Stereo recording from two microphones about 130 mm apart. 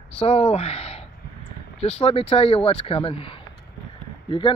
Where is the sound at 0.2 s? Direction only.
50° left (ahead or behind).